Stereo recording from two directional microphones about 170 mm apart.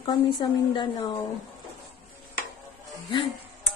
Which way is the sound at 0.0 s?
25° left (ahead or behind).